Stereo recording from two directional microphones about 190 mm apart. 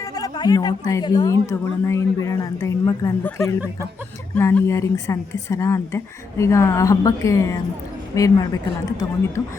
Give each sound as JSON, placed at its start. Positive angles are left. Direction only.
{"t": 0.0, "sound": "a woman's voice", "side_deg": 20}